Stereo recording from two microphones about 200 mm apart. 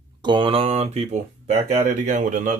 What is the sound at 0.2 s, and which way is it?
Mantra, 25° right (ahead or behind).